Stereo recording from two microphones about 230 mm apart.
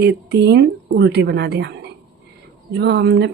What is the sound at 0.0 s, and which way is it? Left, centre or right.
Speech, right.